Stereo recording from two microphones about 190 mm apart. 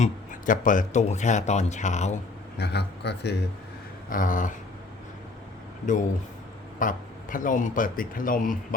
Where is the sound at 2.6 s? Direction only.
60° left (ahead or behind).